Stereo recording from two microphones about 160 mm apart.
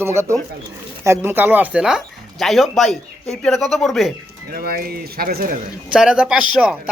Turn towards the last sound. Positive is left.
turn(degrees=-5)  # may be behind; listen again after turning